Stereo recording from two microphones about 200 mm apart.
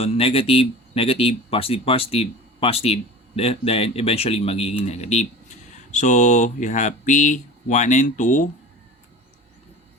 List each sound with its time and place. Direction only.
0.0 s speech: 30° left (ahead or behind)